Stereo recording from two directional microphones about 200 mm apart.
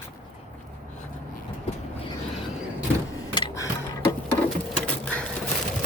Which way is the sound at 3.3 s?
20° left (ahead or behind).